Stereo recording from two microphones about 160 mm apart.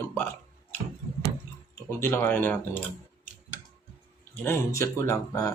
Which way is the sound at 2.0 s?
15° left (ahead or behind).